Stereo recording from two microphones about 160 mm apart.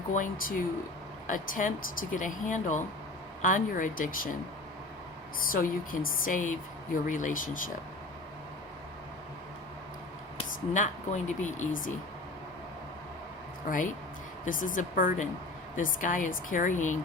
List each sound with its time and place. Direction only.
0.1 s speech: 60° left (ahead or behind)
5.4 s speech: 60° left (ahead or behind)
10.8 s speech: 50° left (ahead or behind)
13.7 s speech: 60° left (ahead or behind)